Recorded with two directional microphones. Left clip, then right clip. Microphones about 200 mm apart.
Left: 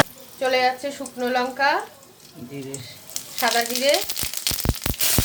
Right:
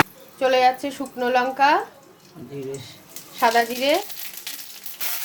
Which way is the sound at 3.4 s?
20° right (ahead or behind).